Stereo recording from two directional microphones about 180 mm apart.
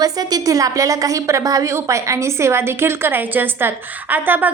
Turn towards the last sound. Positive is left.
turn(degrees=-10)  # may be behind; listen again after turning